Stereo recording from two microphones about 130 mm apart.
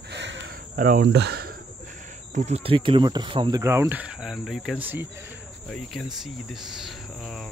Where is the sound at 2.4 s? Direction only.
55° right (ahead or behind); by 3.6 s 40° right (ahead or behind).